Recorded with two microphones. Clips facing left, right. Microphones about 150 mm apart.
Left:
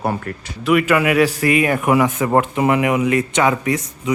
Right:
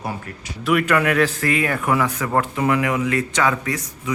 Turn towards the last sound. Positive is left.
turn(degrees=20)  # may be behind; listen again after turning